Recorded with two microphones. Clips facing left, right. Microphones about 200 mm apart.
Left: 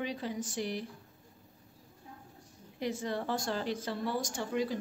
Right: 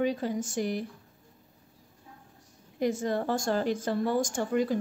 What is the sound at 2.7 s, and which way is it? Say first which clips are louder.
A woman's voice: right 7 dB; 45° right (ahead or behind).